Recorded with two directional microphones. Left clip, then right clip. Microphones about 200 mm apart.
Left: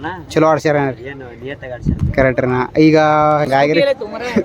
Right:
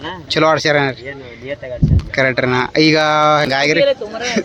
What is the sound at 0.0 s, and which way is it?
Speech, 10° left (ahead or behind).